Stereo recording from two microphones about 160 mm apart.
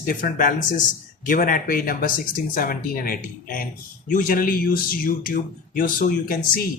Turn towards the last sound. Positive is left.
turn(degrees=65)  # may be behind; listen again after turning